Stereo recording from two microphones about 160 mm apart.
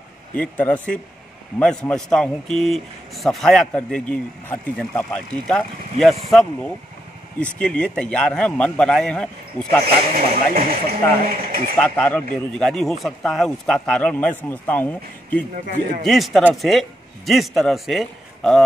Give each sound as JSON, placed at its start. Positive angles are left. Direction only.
{"t": 0.4, "sound": "a man's voice", "side_deg": 10}
{"t": 9.8, "sound": "speech", "side_deg": -65}
{"t": 11.8, "sound": "a man's voice", "side_deg": 5}